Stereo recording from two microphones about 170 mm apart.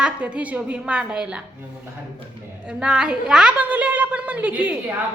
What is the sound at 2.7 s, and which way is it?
A woman's voice, 5° right (ahead or behind).